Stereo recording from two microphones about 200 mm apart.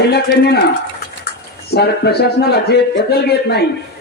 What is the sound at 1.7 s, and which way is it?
A man's voice, 55° left (ahead or behind).